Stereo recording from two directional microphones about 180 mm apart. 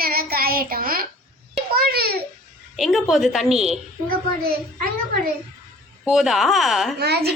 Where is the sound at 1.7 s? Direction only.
60° right (ahead or behind).